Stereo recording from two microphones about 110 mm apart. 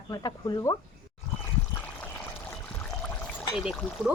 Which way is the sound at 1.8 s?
20° left (ahead or behind).